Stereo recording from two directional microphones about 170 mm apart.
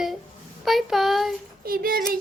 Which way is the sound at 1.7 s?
60° right (ahead or behind).